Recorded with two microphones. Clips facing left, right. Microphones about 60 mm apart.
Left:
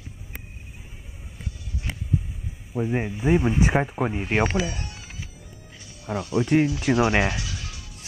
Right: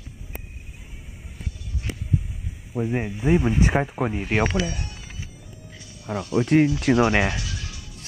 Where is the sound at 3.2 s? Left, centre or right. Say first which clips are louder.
Right 1 dB; centre.